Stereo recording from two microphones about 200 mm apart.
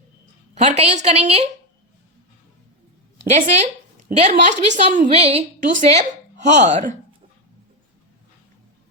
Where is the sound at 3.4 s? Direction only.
35° right (ahead or behind).